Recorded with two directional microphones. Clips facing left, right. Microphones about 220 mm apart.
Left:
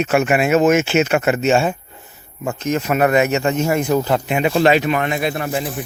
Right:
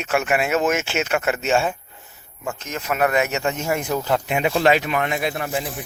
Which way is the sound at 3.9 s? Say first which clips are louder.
Left 5 dB; 10° left (ahead or behind).